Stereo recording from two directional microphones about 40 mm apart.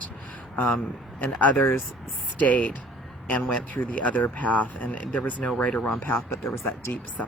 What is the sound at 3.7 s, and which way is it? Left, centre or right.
Speech, left.